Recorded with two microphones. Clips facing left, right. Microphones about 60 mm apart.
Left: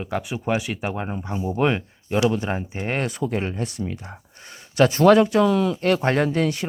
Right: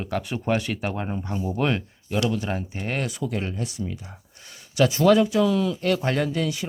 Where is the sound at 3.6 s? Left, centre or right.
Left.